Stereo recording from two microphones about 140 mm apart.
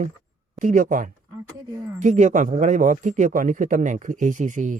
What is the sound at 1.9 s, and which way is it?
Speech, 60° right (ahead or behind).